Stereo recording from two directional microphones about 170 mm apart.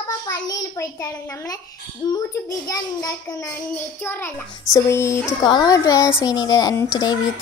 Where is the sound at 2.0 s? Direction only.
25° left (ahead or behind).